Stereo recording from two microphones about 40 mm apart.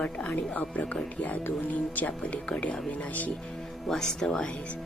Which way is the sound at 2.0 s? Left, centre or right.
Left.